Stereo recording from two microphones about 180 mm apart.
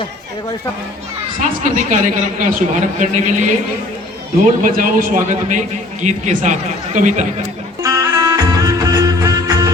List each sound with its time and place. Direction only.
1.4 s a man's voice: 45° right (ahead or behind)
4.6 s a man's voice: 50° right (ahead or behind)
7.8 s music: 20° right (ahead or behind)